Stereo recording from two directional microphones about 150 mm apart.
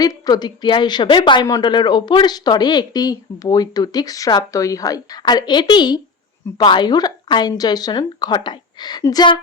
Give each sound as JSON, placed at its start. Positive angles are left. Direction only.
{"t": 0.0, "sound": "a woman's voice", "side_deg": 25}